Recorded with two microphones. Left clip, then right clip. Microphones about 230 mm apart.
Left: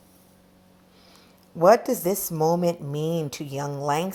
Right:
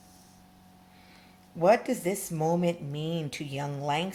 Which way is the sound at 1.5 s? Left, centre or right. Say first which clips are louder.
Left 6 dB; left.